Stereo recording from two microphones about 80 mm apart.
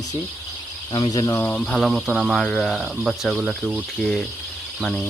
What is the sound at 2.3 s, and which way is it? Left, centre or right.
Speech, centre.